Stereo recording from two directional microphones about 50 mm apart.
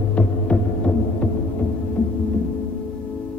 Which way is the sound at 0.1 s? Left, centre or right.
Left.